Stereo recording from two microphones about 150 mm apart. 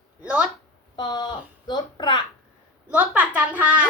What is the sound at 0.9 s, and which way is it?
Speech, 30° left (ahead or behind).